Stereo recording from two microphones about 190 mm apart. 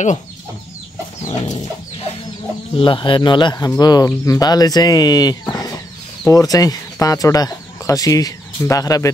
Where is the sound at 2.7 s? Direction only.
25° left (ahead or behind).